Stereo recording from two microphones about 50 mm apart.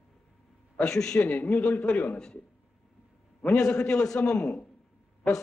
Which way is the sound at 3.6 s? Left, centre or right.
Centre.